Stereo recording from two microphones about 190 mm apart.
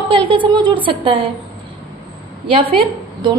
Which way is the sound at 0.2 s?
25° right (ahead or behind).